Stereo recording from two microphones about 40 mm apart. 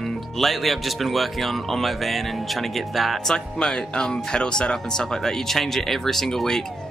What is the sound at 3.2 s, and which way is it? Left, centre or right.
Speech, centre.